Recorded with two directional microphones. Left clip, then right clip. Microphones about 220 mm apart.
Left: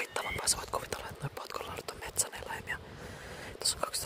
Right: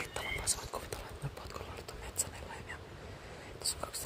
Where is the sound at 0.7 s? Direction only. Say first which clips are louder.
Left 6 dB; 35° left (ahead or behind).